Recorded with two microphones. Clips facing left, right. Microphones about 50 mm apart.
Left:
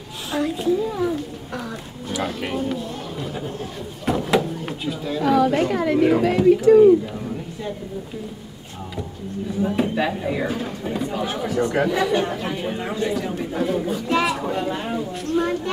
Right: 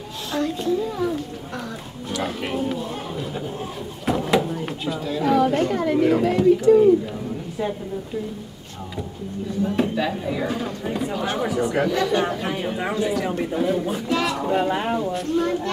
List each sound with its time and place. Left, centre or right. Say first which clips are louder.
0.3 s a woman's voice: left 2 dB; centre
9.9 s a woman's voice: left 1 dB; centre
10.4 s speech: even; centre
11.9 s a woman's voice: left 1 dB; centre
12.2 s speech: right 1 dB; centre
14.0 s a woman's voice: left 4 dB; centre
14.5 s speech: right 3 dB; centre
15.3 s a woman's voice: left 2 dB; centre